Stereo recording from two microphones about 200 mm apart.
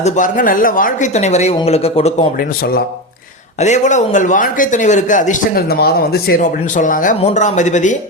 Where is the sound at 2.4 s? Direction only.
50° left (ahead or behind).